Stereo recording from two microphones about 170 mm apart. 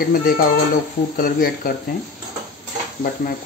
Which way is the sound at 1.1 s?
55° left (ahead or behind).